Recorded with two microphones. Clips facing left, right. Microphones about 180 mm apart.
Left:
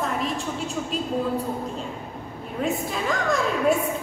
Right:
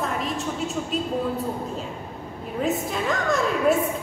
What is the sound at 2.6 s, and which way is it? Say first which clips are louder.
A woman's voice: right 1 dB; centre (ahead or behind).